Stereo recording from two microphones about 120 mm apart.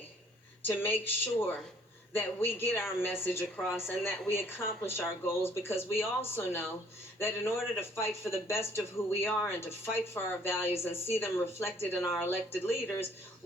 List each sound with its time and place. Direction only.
0.8 s speech: 15° left (ahead or behind)